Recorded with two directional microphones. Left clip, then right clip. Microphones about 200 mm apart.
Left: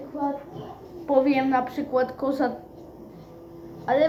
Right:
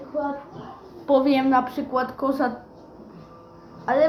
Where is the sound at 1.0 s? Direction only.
45° right (ahead or behind); by 2.5 s 25° right (ahead or behind).